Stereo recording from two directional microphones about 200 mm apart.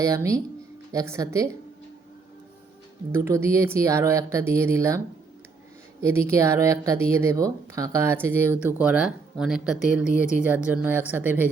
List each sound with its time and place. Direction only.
0.0 s speech: 15° right (ahead or behind)
3.1 s speech: 15° right (ahead or behind)
6.0 s speech: 15° right (ahead or behind)